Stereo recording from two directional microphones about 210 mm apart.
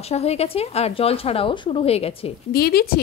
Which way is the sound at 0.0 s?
30° left (ahead or behind).